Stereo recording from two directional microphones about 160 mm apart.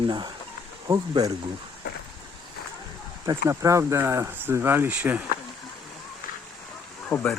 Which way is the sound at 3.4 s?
20° right (ahead or behind).